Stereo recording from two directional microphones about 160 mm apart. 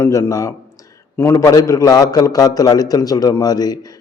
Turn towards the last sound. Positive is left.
turn(degrees=25)  # may be behind; listen again after turning